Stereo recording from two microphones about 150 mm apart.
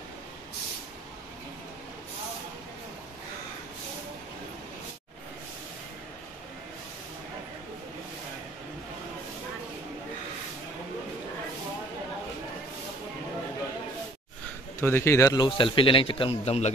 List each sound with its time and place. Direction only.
14.8 s a man's voice: 15° left (ahead or behind); by 16.7 s 45° left (ahead or behind)